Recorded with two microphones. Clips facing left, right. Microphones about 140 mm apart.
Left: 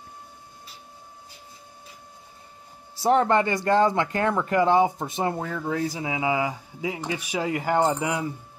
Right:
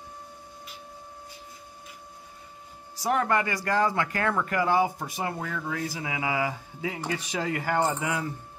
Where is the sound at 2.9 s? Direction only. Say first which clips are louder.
Left 5 dB; 25° left (ahead or behind).